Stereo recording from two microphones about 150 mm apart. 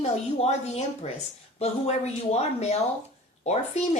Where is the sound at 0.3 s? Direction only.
45° left (ahead or behind).